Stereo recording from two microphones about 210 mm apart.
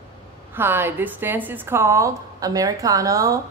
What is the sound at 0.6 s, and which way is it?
A woman's voice, 10° right (ahead or behind).